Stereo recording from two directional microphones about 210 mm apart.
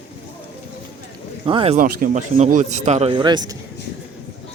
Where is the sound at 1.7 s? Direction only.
40° right (ahead or behind); by 3.5 s 20° right (ahead or behind).